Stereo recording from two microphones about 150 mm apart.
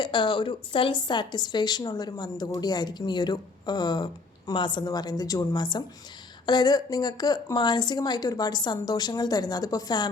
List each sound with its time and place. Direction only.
0.0 s a woman's voice: 30° left (ahead or behind)